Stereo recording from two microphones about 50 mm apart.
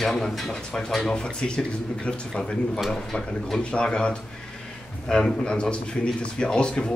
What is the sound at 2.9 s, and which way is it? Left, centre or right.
A man's voice, centre.